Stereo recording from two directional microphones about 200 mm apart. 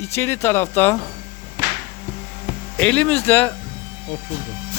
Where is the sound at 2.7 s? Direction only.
5° left (ahead or behind).